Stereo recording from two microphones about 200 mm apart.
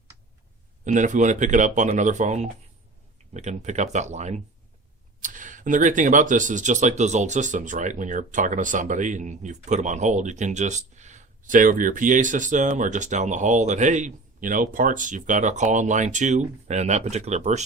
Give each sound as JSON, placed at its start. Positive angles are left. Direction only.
{"t": 0.9, "sound": "speech", "side_deg": -40}